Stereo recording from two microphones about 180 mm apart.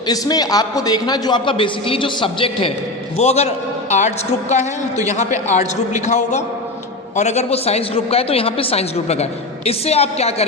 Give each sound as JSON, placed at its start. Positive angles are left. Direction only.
{"t": 0.1, "sound": "a man's voice", "side_deg": 20}